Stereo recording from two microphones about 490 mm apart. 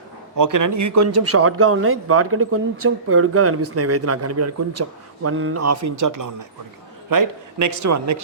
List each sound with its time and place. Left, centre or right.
0.3 s a man's voice: right